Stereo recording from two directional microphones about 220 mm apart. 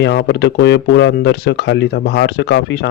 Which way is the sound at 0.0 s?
50° left (ahead or behind).